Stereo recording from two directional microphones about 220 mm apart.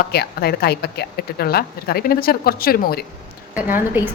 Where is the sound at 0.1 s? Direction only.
45° left (ahead or behind).